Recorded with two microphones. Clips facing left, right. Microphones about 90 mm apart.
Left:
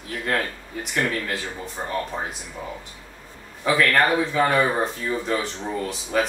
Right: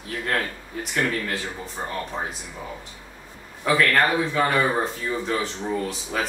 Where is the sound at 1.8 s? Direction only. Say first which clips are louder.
Left 1 dB; 5° left (ahead or behind).